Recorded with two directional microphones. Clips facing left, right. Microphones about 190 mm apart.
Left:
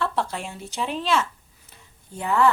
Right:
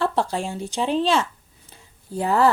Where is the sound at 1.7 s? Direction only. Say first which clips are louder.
Right 9 dB; 35° right (ahead or behind).